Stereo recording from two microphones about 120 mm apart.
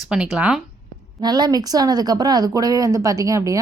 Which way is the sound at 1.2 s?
35° right (ahead or behind).